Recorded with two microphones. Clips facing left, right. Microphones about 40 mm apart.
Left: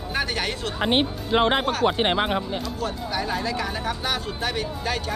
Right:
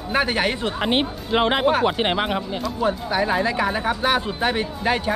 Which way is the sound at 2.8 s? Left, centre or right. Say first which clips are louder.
Right 10 dB; right.